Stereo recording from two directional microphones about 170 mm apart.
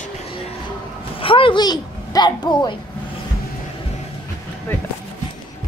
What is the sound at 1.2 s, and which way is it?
A woman's voice, 30° left (ahead or behind).